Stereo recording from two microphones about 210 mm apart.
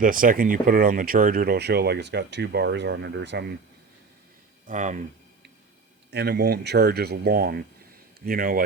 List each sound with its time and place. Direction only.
0.0 s speech: 40° right (ahead or behind); by 3.4 s 55° right (ahead or behind)
4.6 s speech: 35° right (ahead or behind)
6.1 s speech: 50° right (ahead or behind)